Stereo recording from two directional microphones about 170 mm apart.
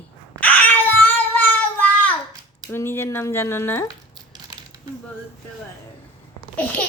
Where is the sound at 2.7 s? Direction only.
15° left (ahead or behind).